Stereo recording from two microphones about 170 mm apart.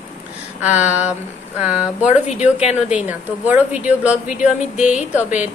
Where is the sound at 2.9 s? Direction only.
5° right (ahead or behind).